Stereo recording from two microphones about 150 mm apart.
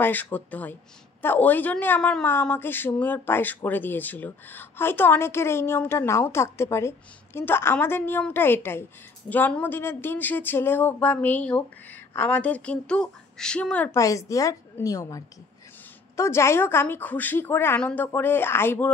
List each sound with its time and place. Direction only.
0.0 s a woman's voice: 10° left (ahead or behind)
13.9 s a woman's voice: 20° left (ahead or behind)